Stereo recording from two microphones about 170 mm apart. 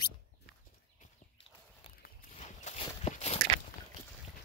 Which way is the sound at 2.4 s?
40° left (ahead or behind).